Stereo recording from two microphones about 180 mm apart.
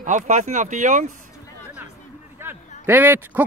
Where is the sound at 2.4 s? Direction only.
10° right (ahead or behind).